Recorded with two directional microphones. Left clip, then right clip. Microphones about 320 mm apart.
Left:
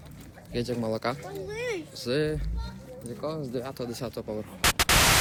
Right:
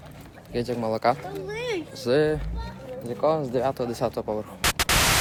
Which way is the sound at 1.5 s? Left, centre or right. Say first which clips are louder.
Right 2 dB; right.